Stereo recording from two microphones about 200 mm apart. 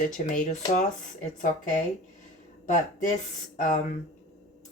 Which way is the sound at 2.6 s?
40° left (ahead or behind).